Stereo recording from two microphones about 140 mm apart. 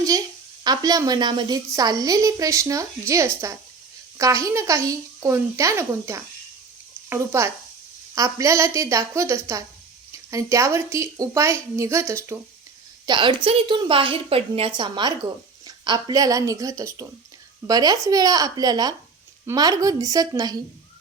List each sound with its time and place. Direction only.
0.6 s a woman's voice: 30° right (ahead or behind)
13.1 s a woman's voice: 35° right (ahead or behind)